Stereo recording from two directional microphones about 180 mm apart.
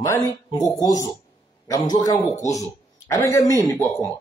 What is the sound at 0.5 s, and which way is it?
A man's voice, 20° left (ahead or behind).